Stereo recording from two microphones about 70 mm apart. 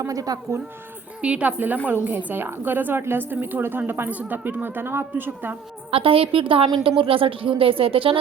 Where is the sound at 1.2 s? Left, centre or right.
Centre.